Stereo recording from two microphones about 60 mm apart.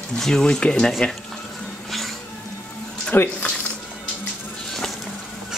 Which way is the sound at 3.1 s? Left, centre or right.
Left.